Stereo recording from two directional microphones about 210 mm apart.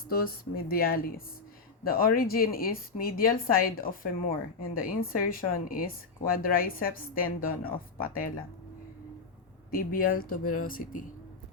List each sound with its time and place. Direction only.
0.1 s a woman's voice: 45° left (ahead or behind)
9.7 s a woman's voice: 40° left (ahead or behind)